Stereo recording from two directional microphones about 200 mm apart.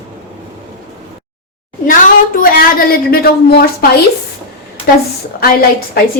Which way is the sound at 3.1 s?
50° left (ahead or behind).